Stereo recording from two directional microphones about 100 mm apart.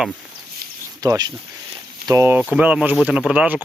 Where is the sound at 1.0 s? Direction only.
40° right (ahead or behind).